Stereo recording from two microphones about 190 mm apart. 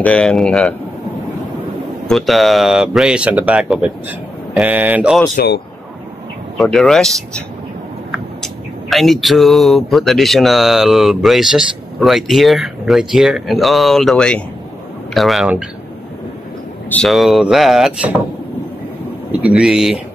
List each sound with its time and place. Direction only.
0.0 s speech: 5° left (ahead or behind)
2.0 s speech: centre (ahead or behind)
4.6 s mantra: 10° right (ahead or behind)
5.3 s speech: 60° left (ahead or behind)
6.6 s speech: centre (ahead or behind)
16.9 s speech: centre (ahead or behind)
19.5 s speech: 5° right (ahead or behind)